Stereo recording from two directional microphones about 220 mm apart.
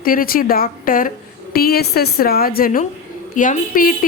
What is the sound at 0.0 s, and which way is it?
A woman's voice, 40° left (ahead or behind).